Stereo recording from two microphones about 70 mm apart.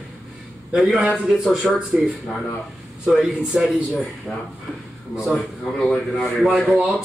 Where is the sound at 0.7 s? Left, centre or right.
Centre.